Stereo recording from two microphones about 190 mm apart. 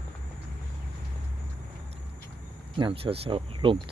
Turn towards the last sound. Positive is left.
turn(degrees=-30)  # may be behind; listen again after turning